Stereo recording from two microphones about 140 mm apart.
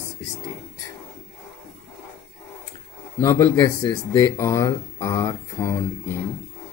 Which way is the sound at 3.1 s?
20° left (ahead or behind).